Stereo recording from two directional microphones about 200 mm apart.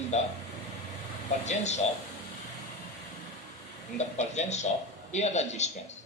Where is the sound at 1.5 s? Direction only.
35° left (ahead or behind).